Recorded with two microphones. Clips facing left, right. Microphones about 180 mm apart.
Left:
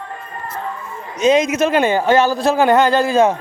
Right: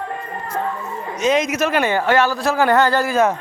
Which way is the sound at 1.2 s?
25° left (ahead or behind).